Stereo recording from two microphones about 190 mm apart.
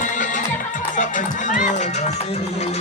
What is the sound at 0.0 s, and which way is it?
Music, 40° left (ahead or behind).